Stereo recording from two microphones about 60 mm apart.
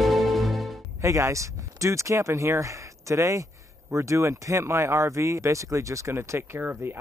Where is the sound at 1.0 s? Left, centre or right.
Right.